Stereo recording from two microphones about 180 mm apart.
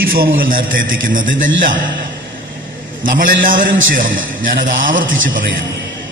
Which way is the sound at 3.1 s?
50° right (ahead or behind).